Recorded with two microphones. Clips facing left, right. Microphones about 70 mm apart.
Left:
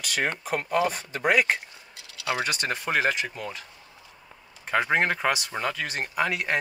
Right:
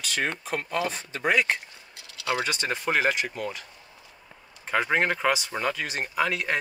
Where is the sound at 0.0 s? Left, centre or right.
Centre.